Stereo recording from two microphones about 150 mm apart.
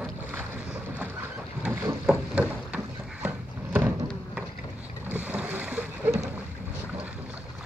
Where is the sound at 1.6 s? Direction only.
10° right (ahead or behind).